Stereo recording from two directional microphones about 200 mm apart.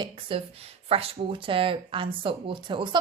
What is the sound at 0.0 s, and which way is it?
A woman's voice, 25° right (ahead or behind).